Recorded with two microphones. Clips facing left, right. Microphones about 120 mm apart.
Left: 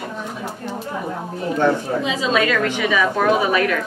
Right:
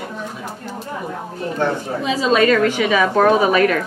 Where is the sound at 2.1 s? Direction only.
40° right (ahead or behind).